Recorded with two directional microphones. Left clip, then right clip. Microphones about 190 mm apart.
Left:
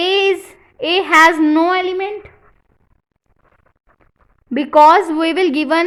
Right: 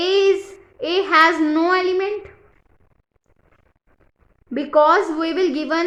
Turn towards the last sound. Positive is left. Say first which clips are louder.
# left 5 dB
turn(degrees=40)  # may be behind; listen again after turning